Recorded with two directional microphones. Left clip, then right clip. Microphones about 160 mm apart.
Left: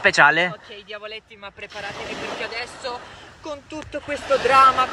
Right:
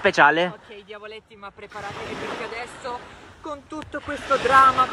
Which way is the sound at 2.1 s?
50° left (ahead or behind).